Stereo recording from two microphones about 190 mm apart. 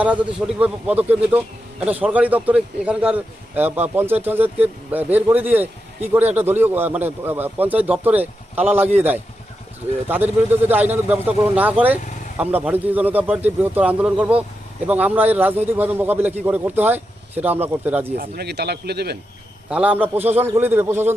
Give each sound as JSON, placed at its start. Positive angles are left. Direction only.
{"t": 0.0, "sound": "a man's voice", "side_deg": -5}
{"t": 18.2, "sound": "speech", "side_deg": -60}
{"t": 19.7, "sound": "a man's voice", "side_deg": -10}